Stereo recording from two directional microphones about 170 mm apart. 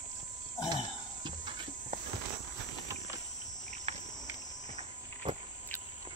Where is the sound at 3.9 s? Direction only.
35° right (ahead or behind).